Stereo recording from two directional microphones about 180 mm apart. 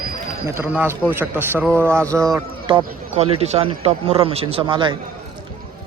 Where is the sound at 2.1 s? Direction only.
15° right (ahead or behind).